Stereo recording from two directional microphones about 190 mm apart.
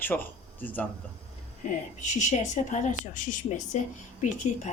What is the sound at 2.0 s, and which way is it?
A woman's voice, 40° left (ahead or behind).